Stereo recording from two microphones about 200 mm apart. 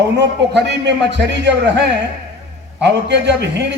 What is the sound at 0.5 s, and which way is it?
A man's voice, 60° right (ahead or behind).